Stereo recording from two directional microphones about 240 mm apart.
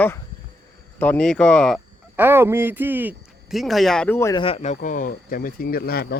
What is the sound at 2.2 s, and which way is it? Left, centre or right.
Speech, centre.